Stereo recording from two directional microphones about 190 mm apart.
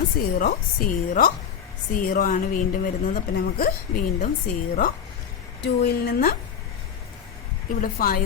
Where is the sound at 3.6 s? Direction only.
50° left (ahead or behind).